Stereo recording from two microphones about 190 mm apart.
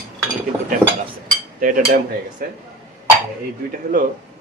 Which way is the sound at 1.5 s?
45° right (ahead or behind).